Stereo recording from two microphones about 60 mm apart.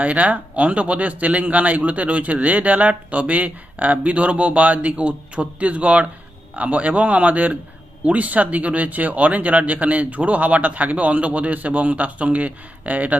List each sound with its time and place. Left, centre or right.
0.0 s speech: right